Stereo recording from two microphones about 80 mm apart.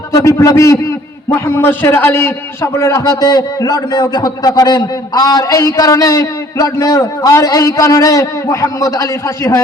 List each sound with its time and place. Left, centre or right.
0.1 s a man's voice: left
2.7 s a man's voice: left